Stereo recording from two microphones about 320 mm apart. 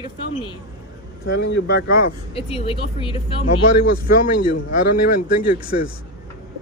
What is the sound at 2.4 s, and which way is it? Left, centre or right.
Speech, centre.